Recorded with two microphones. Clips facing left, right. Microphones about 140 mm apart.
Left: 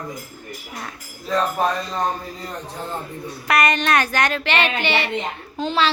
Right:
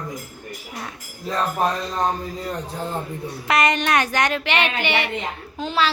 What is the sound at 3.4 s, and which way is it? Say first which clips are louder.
A woman's voice: left 1 dB; 20° right (ahead or behind).